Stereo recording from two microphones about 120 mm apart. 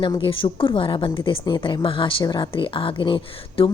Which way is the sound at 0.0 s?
45° left (ahead or behind).